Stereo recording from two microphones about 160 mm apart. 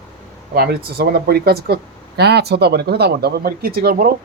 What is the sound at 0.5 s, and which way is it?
Speech, 75° right (ahead or behind).